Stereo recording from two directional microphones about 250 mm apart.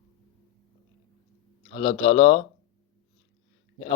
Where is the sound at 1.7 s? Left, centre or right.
Left.